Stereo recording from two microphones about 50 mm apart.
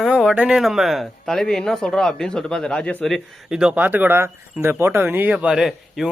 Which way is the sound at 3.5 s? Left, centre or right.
Centre.